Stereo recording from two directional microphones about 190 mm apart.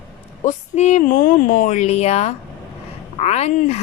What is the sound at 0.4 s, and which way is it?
Speech, 40° left (ahead or behind).